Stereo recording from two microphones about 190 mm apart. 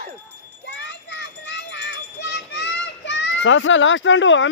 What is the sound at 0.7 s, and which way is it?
Children playing, 70° left (ahead or behind).